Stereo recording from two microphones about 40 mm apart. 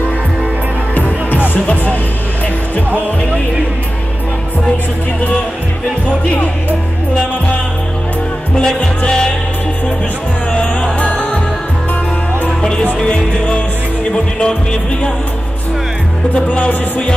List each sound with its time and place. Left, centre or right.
0.9 s music: left
8.7 s music: left
10.5 s music: left
12.4 s music: left
16.3 s music: left